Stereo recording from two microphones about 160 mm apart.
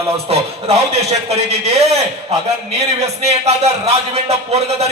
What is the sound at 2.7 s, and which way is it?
Speech, 40° right (ahead or behind).